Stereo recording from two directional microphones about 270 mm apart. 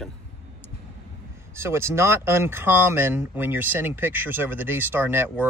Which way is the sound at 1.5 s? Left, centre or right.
Centre.